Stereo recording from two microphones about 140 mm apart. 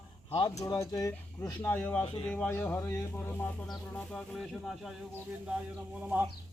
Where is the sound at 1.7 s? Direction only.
10° left (ahead or behind).